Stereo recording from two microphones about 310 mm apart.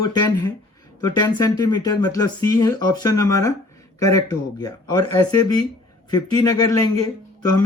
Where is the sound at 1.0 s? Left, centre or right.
Centre.